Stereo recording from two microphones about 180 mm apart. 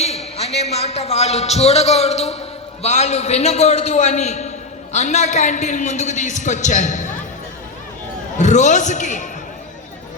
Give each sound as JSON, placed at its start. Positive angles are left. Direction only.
{"t": 0.0, "sound": "a man's voice", "side_deg": 35}
{"t": 8.4, "sound": "a man's voice", "side_deg": 40}